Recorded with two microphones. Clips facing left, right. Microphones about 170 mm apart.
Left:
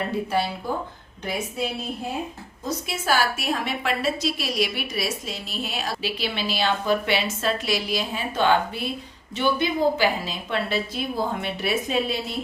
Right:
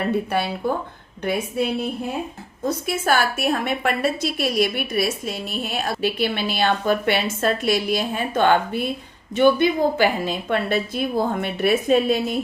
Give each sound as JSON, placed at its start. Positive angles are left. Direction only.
{"t": 0.3, "sound": "a woman's voice", "side_deg": -60}
{"t": 2.6, "sound": "a woman's voice", "side_deg": -55}